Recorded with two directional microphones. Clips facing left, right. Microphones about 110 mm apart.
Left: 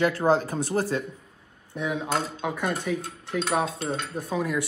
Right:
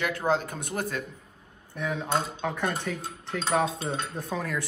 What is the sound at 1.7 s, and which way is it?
Cutlery, 15° left (ahead or behind).